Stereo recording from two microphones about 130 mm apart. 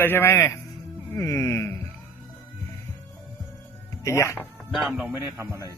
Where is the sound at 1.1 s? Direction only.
20° left (ahead or behind).